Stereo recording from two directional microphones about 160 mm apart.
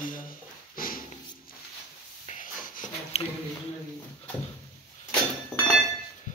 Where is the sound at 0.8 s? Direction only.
60° left (ahead or behind).